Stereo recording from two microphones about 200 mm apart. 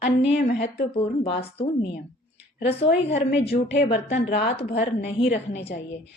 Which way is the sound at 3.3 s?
55° left (ahead or behind).